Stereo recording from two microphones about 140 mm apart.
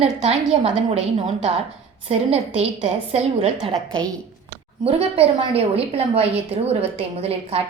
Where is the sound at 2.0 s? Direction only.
50° right (ahead or behind).